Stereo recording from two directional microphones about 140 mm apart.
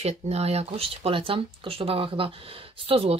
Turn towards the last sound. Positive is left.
turn(degrees=-40)  # may be behind; listen again after turning